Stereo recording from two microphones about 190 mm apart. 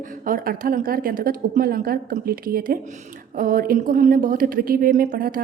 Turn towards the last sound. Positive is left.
turn(degrees=-50)  # may be behind; listen again after turning